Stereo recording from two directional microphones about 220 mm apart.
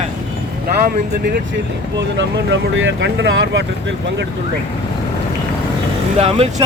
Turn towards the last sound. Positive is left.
turn(degrees=-30)  # may be behind; listen again after turning